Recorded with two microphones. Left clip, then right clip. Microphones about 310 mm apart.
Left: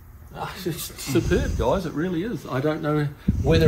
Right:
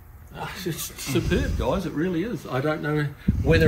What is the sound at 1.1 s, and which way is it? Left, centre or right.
Speech, centre.